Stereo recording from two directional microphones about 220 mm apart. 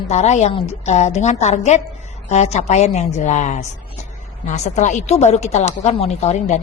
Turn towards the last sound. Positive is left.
turn(degrees=30)  # may be behind; listen again after turning